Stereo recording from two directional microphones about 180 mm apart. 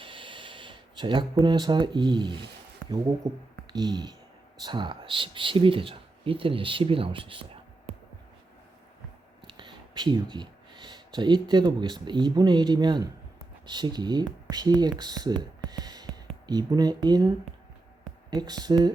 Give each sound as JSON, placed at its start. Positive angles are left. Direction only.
{"t": 0.0, "sound": "speech", "side_deg": -30}
{"t": 3.7, "sound": "speech", "side_deg": -25}
{"t": 9.5, "sound": "speech", "side_deg": -25}